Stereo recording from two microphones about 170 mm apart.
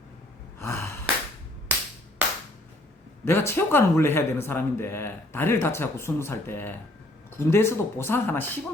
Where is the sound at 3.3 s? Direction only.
15° left (ahead or behind).